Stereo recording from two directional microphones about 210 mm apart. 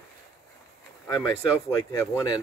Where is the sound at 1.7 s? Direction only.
15° left (ahead or behind).